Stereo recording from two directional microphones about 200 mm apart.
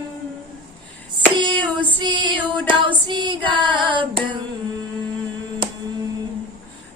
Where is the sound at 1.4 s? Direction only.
25° right (ahead or behind).